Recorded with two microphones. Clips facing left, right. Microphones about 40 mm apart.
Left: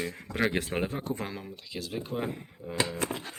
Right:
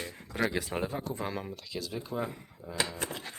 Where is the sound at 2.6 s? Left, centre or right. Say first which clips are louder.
Left 4 dB; left.